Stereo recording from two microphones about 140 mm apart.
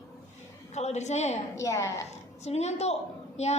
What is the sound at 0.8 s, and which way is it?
Speech, 55° left (ahead or behind).